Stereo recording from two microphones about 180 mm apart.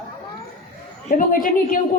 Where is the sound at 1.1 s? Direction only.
50° left (ahead or behind).